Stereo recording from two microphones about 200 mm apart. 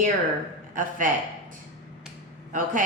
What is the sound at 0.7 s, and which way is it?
Speech, 40° right (ahead or behind).